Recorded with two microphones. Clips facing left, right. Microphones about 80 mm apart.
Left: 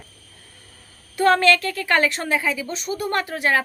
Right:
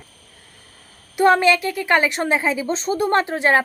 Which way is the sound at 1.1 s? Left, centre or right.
Centre.